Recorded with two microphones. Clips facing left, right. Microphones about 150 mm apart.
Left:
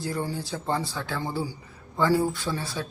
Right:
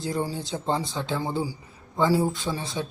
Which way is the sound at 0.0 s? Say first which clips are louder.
Right 2 dB; 20° right (ahead or behind).